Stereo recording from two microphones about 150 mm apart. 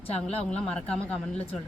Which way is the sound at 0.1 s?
45° left (ahead or behind).